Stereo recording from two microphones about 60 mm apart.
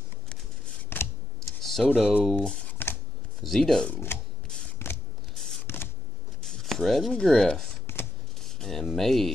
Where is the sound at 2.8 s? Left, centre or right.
Left.